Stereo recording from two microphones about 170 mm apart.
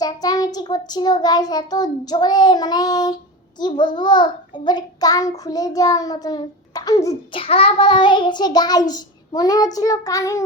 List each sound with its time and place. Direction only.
0.0 s child singing: 20° left (ahead or behind)
7.3 s child singing: 35° left (ahead or behind)